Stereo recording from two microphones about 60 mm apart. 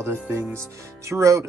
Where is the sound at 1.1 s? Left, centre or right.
Right.